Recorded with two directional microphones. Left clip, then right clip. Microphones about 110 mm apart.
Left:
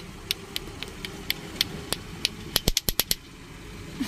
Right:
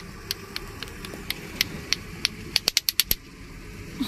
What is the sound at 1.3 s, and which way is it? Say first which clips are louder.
Vehicle: even; 20° left (ahead or behind).